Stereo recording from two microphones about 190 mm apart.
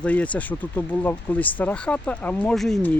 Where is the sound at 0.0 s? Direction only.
5° left (ahead or behind).